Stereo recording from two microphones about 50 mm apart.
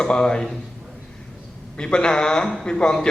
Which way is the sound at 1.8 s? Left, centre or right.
Centre.